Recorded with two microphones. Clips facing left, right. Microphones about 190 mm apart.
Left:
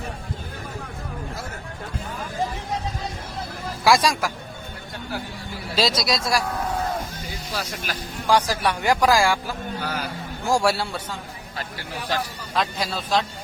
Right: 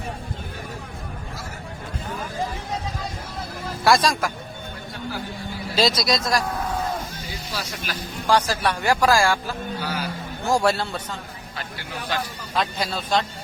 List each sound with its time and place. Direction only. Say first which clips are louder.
3.8 s speech: even; 10° left (ahead or behind)
5.7 s a man's voice: right 1 dB; centre (ahead or behind)
8.3 s speech: even; 15° left (ahead or behind)
9.8 s a sound: even; 50° left (ahead or behind)
10.5 s speech: even; 5° left (ahead or behind)
12.5 s a man's voice: even; centre (ahead or behind)